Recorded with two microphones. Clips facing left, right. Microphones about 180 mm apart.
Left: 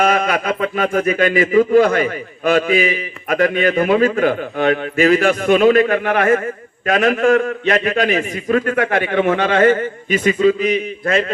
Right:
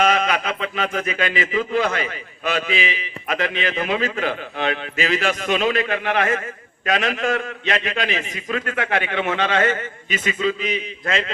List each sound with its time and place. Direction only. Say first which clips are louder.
0.0 s a man's voice: left 3 dB; 50° left (ahead or behind)